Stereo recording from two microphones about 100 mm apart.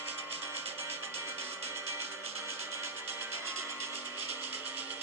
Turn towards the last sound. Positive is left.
turn(degrees=-25)  # may be behind; listen again after turning